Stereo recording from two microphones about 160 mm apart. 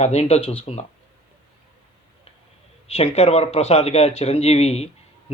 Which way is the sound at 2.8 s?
40° left (ahead or behind).